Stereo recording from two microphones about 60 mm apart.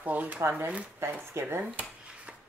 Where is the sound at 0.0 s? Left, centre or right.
Right.